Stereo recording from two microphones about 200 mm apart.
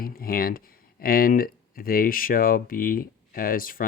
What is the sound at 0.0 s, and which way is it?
Speech, 45° left (ahead or behind).